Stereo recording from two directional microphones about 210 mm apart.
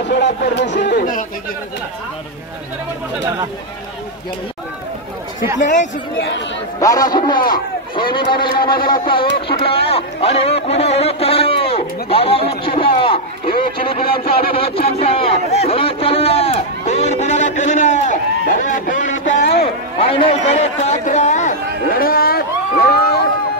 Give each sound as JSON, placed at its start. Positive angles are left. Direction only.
{"t": 0.1, "sound": "speech", "side_deg": 55}
{"t": 5.6, "sound": "speech", "side_deg": 35}
{"t": 6.8, "sound": "a man's voice", "side_deg": 15}
{"t": 14.5, "sound": "a man's voice", "side_deg": 25}
{"t": 18.4, "sound": "a sound", "side_deg": 40}
{"t": 19.6, "sound": "chatter", "side_deg": 25}